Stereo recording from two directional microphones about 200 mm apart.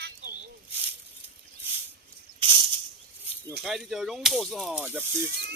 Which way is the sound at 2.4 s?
25° right (ahead or behind).